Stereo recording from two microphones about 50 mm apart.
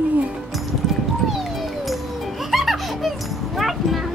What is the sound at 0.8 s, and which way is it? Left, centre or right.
Music, centre.